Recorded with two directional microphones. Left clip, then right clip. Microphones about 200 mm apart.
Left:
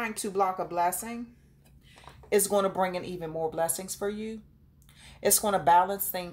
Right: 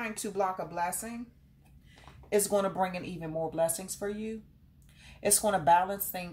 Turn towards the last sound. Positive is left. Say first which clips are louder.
# left 3 dB
turn(degrees=35)  # may be behind; listen again after turning